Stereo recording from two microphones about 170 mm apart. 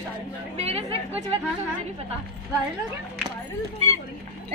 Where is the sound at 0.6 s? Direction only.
40° right (ahead or behind).